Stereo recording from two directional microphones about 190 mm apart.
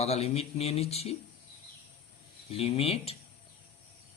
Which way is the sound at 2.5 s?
30° left (ahead or behind).